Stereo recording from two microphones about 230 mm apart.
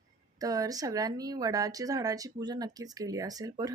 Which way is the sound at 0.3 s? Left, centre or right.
Centre.